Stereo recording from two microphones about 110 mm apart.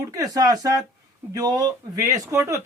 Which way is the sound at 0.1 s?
35° right (ahead or behind).